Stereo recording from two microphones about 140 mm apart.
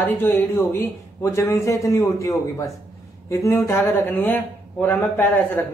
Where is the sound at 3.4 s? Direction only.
20° left (ahead or behind).